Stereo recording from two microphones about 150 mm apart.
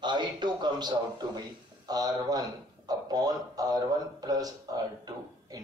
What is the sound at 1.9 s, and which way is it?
A man's voice, 25° right (ahead or behind).